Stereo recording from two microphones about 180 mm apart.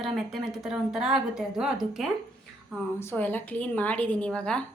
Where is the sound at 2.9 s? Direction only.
10° left (ahead or behind).